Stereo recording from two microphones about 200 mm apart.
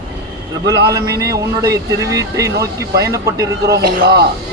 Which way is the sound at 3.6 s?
55° right (ahead or behind).